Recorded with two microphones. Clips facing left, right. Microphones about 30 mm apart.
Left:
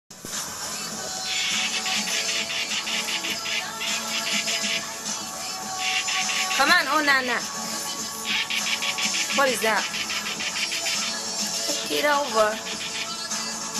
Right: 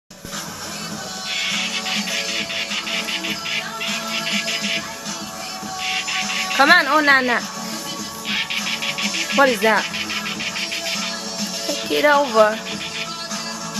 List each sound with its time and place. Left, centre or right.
1.3 s music: centre
11.6 s speech: centre